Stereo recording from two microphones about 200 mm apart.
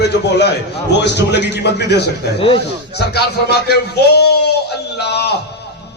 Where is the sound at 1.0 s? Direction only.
60° left (ahead or behind).